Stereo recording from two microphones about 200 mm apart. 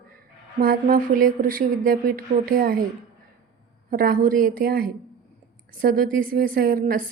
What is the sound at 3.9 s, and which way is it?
A woman's voice, 45° right (ahead or behind).